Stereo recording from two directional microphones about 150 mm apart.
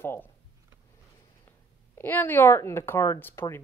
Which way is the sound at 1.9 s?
10° left (ahead or behind).